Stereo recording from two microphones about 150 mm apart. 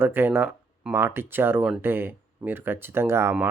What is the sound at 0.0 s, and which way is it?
Speech, 15° right (ahead or behind).